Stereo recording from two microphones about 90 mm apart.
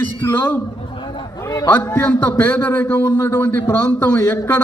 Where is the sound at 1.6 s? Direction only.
20° left (ahead or behind).